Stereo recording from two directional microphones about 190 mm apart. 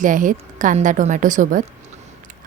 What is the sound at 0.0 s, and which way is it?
A woman's voice, 45° right (ahead or behind).